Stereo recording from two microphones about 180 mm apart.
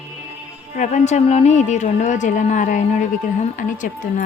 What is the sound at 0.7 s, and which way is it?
A woman's voice, 40° left (ahead or behind).